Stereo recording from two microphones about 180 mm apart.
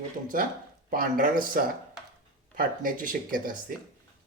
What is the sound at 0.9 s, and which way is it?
Speech, 50° right (ahead or behind).